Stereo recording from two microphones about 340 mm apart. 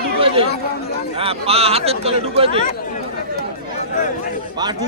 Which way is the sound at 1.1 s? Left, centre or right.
Centre.